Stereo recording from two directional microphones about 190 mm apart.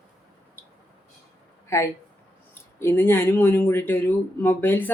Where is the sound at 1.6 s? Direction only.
15° left (ahead or behind).